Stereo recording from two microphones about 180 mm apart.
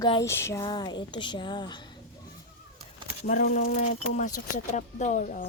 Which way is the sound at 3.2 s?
55° left (ahead or behind).